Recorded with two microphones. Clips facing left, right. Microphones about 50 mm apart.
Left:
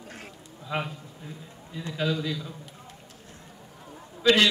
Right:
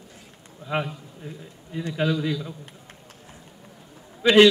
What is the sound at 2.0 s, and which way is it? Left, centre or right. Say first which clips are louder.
Speech: right 4 dB; right.